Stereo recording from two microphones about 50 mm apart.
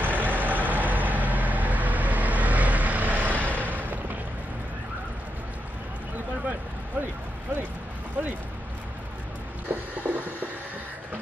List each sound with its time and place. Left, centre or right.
0.0 s vehicle: right
9.7 s printer: right